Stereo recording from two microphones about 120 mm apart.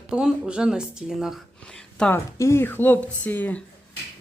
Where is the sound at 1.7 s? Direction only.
5° left (ahead or behind).